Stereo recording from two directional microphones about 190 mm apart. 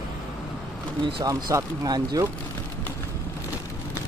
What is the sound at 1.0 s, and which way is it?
Speech, 20° right (ahead or behind).